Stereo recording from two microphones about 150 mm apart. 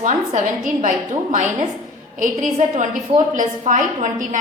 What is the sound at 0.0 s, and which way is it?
A woman's voice, 55° right (ahead or behind).